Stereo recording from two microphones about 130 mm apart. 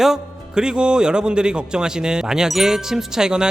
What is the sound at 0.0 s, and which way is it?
A man's voice, 5° right (ahead or behind).